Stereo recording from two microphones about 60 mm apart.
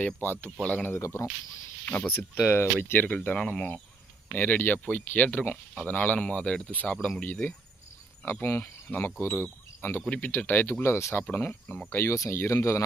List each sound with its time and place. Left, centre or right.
0.2 s speech: left
0.6 s speech: left
0.9 s speech: left
1.8 s speech: left
8.2 s speech: left
10.1 s speech: left
10.3 s speech: left